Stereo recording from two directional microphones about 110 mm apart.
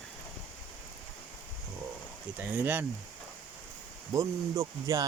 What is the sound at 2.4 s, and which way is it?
Speech, 15° right (ahead or behind).